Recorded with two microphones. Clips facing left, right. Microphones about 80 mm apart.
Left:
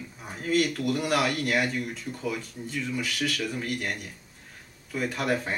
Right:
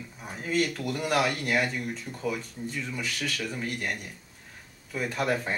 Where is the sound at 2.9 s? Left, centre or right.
Centre.